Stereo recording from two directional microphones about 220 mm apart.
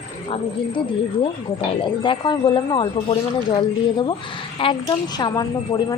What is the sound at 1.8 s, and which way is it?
Speech, 20° left (ahead or behind).